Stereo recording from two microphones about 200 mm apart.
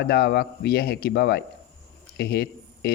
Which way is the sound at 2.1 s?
55° left (ahead or behind).